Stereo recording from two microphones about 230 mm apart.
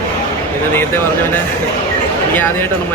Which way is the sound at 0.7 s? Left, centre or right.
Centre.